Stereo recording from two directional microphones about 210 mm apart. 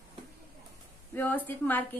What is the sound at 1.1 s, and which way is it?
Speech, 10° left (ahead or behind).